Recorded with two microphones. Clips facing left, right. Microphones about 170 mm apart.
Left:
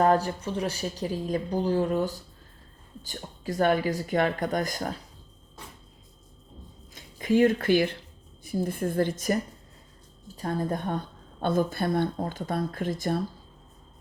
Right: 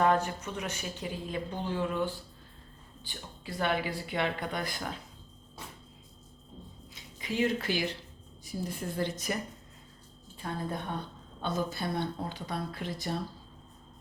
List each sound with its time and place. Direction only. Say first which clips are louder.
0.0 s a woman's voice: left 4 dB; 35° left (ahead or behind)
6.9 s a woman's voice: left 11 dB; 50° left (ahead or behind)